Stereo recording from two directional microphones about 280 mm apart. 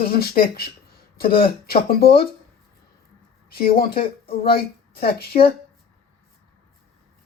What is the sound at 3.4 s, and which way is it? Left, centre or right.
Speech, left.